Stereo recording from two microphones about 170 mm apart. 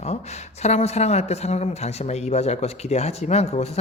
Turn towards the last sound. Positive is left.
turn(degrees=40)  # may be behind; listen again after turning